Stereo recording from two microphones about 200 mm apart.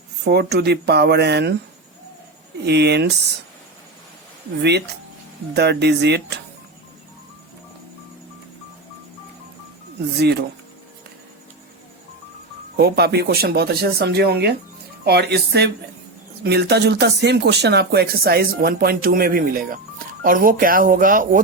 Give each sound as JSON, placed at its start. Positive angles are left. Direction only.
{"t": 0.3, "sound": "speech", "side_deg": -55}
{"t": 2.6, "sound": "speech", "side_deg": -55}
{"t": 5.5, "sound": "speech", "side_deg": -55}
{"t": 10.2, "sound": "speech", "side_deg": -55}
{"t": 12.7, "sound": "speech", "side_deg": -55}